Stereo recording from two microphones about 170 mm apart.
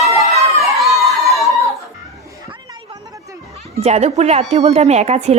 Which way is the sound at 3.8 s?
40° right (ahead or behind).